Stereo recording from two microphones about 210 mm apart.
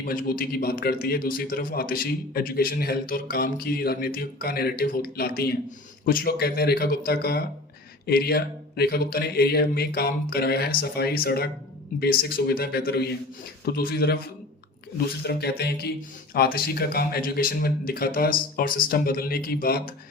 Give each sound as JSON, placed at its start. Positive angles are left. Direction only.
{"t": 0.0, "sound": "a man's voice", "side_deg": 40}
{"t": 15.2, "sound": "a man's voice", "side_deg": 50}